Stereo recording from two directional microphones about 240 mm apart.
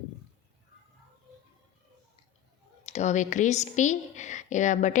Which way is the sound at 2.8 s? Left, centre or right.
Left.